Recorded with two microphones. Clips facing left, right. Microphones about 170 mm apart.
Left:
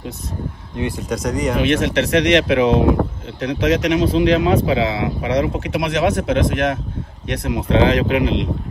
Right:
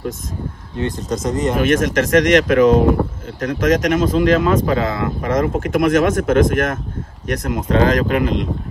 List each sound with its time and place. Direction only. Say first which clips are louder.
1.1 s speech: right 1 dB; centre (ahead or behind)
1.6 s speech: right 1 dB; 45° right (ahead or behind)